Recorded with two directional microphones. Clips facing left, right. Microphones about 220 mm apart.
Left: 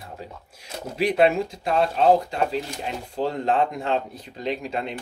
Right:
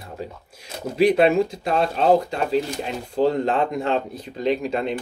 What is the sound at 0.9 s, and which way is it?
Speech, 40° right (ahead or behind).